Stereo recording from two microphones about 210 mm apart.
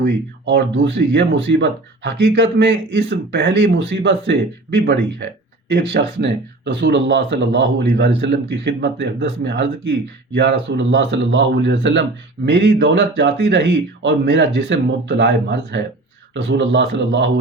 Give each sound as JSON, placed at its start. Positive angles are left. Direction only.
{"t": 0.0, "sound": "speech", "side_deg": -55}